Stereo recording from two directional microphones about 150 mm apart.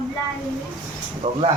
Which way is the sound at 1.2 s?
45° right (ahead or behind).